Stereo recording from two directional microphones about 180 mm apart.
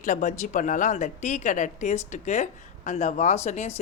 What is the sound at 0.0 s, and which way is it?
A woman's voice, 45° left (ahead or behind).